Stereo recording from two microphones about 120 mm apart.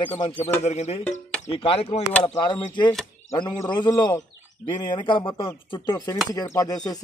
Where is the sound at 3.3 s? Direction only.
30° left (ahead or behind).